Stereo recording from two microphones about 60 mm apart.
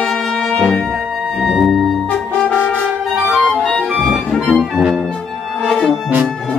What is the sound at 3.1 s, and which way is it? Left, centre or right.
Clarinet, centre.